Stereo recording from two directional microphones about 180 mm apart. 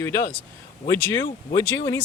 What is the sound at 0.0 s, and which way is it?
Speech, 15° left (ahead or behind).